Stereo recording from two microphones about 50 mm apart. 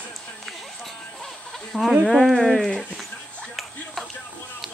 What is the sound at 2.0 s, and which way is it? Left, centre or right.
Speech, centre.